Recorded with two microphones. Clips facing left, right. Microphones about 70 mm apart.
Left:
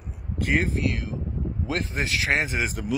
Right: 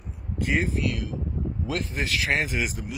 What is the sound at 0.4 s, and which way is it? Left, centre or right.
Speech, left.